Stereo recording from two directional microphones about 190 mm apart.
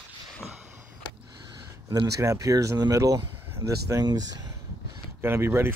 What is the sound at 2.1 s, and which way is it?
Speech, 15° right (ahead or behind).